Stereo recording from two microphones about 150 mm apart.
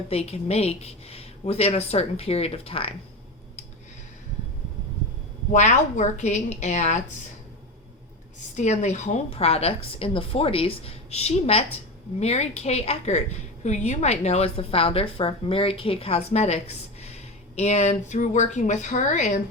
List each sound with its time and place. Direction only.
0.1 s a woman's voice: 45° left (ahead or behind)
5.5 s a woman's voice: 50° left (ahead or behind)
8.5 s a woman's voice: 50° left (ahead or behind)